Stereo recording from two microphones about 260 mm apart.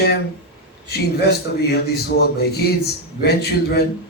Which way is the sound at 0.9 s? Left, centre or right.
Left.